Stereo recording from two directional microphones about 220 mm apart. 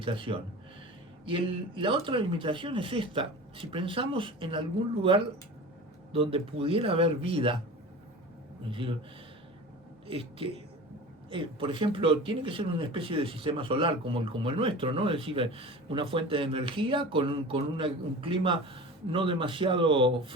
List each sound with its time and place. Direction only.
0.0 s speech: 25° right (ahead or behind)
6.1 s speech: 25° right (ahead or behind)
8.7 s speech: 25° right (ahead or behind)
10.1 s speech: 25° right (ahead or behind)